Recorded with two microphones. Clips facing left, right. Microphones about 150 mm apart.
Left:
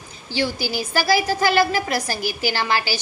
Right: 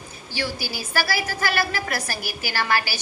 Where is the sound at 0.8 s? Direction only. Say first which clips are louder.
Left 6 dB; 15° left (ahead or behind).